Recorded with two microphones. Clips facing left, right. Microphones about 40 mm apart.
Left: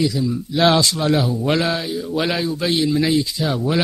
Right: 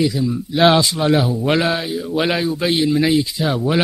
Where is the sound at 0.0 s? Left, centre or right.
Centre.